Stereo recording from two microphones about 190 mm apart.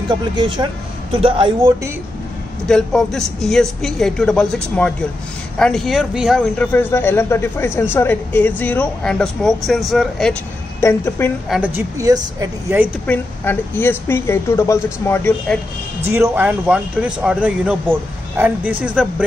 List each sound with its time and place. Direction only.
0.1 s speech: 25° right (ahead or behind)
2.7 s speech: 5° left (ahead or behind)
10.8 s speech: 15° left (ahead or behind)
11.4 s a man's voice: 5° right (ahead or behind)
13.0 s speech: 10° left (ahead or behind)
16.1 s a man's voice: 10° right (ahead or behind)